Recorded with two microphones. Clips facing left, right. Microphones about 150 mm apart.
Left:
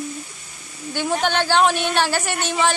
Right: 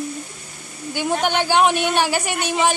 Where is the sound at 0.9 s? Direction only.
15° right (ahead or behind).